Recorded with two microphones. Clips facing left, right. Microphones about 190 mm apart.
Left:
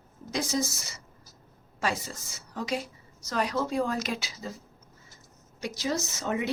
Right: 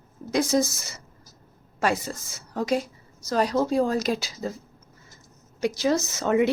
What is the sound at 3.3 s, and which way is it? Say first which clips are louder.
Speech: right 6 dB; 35° right (ahead or behind).